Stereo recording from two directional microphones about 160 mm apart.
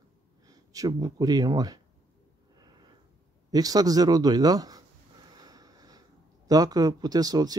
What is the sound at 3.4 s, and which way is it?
Speech, 25° right (ahead or behind).